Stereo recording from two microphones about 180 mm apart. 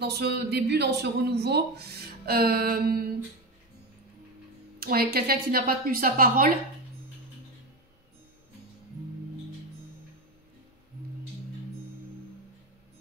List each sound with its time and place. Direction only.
0.0 s a man's voice: 65° right (ahead or behind)
4.7 s a man's voice: 55° right (ahead or behind)